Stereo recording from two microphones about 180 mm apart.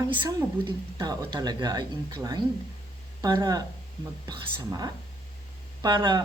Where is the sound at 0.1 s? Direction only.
20° right (ahead or behind).